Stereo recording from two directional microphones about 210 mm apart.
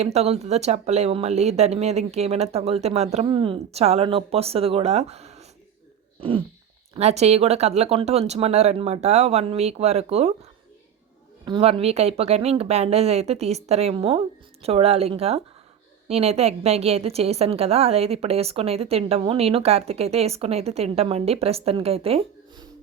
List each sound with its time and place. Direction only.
0.0 s speech: 30° right (ahead or behind)
6.1 s a sound: 25° right (ahead or behind)
6.9 s speech: 30° right (ahead or behind)
11.4 s a woman's voice: 25° right (ahead or behind)